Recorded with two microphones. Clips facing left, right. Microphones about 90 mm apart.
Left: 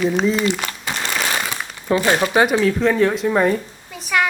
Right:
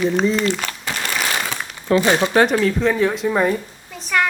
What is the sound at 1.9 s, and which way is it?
A woman's voice, 15° left (ahead or behind).